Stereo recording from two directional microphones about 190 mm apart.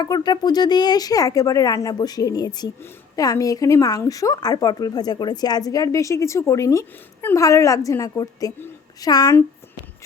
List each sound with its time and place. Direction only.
0.0 s speech: 20° left (ahead or behind)